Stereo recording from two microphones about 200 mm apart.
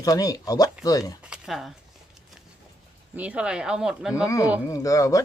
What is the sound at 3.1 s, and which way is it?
Speech, 5° right (ahead or behind).